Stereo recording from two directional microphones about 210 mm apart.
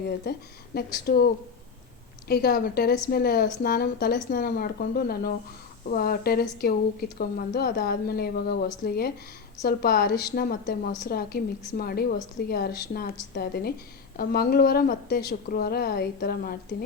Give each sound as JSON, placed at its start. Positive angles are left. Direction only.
{"t": 0.0, "sound": "a woman's voice", "side_deg": 45}